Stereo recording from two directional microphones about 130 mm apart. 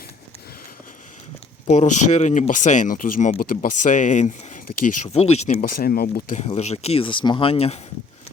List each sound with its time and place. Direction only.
1.6 s speech: 60° left (ahead or behind)
5.0 s speech: 55° left (ahead or behind); by 6.4 s 80° left
6.4 s speech: 55° left (ahead or behind)